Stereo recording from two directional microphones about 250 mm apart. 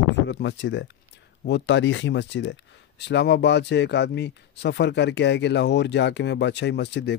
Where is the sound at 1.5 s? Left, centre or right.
Left.